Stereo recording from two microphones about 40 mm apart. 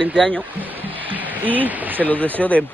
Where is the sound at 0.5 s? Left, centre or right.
Right.